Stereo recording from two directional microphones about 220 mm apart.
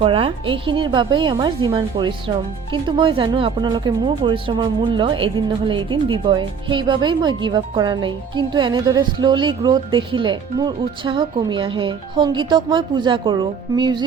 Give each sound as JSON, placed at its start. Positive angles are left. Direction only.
{"t": 0.0, "sound": "speech", "side_deg": -25}